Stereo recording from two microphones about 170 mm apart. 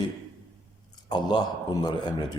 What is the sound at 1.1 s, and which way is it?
Speech, 25° left (ahead or behind).